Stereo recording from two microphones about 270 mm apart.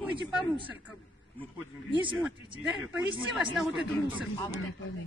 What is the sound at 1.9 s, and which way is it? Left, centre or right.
Speech, centre.